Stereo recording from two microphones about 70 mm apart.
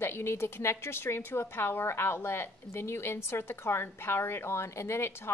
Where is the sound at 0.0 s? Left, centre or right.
Left.